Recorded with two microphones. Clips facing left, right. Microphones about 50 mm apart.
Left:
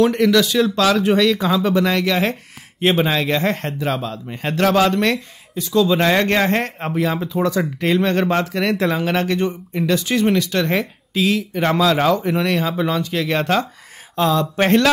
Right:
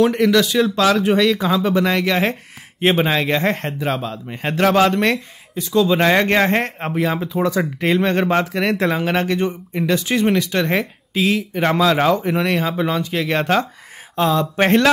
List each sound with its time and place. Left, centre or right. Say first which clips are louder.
0.0 s speech: even; centre